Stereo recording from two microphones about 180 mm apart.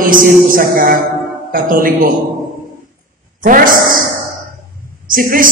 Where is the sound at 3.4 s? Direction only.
50° right (ahead or behind).